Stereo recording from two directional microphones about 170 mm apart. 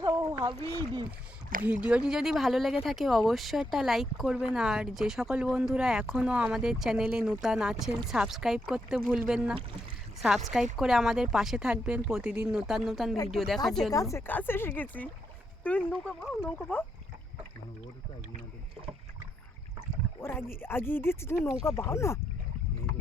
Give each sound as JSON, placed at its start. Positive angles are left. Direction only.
{"t": 0.0, "sound": "a sound", "side_deg": -25}
{"t": 1.8, "sound": "speech", "side_deg": -5}
{"t": 13.9, "sound": "speech", "side_deg": 20}
{"t": 20.6, "sound": "speech", "side_deg": 15}